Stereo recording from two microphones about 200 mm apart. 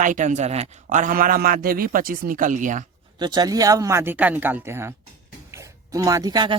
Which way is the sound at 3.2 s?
20° right (ahead or behind).